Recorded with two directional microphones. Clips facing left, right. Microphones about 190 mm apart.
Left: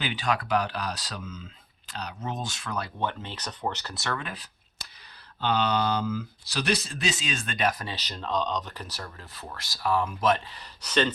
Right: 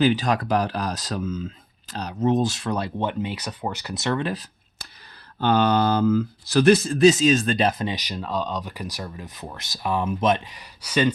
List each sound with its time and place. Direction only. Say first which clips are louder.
0.0 s speech: right 9 dB; 40° right (ahead or behind); by 4.2 s 20° right (ahead or behind)
4.2 s speech: right 11 dB; 35° right (ahead or behind)
5.4 s speech: right 6 dB; 50° right (ahead or behind); by 11.1 s 10° right (ahead or behind)